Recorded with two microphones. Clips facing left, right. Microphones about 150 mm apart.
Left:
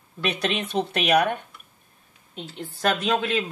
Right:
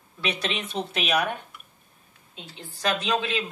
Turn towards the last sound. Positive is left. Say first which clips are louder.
# left 3 dB
turn(degrees=50)  # may be behind; listen again after turning